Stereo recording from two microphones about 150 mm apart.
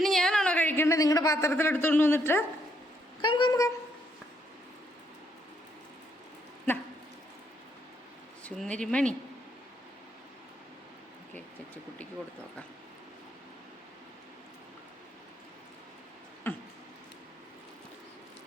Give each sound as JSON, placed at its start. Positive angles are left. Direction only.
{"t": 0.0, "sound": "a woman's voice", "side_deg": 5}
{"t": 3.2, "sound": "speech", "side_deg": 30}
{"t": 8.4, "sound": "speech", "side_deg": 5}
{"t": 11.3, "sound": "vehicle", "side_deg": 10}
{"t": 16.4, "sound": "a sound", "side_deg": 15}